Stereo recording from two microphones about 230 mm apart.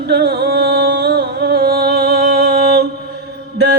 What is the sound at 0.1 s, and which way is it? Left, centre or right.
Music, right.